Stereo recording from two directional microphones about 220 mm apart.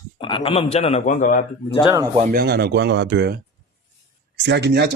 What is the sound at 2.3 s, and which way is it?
Speech, 45° right (ahead or behind).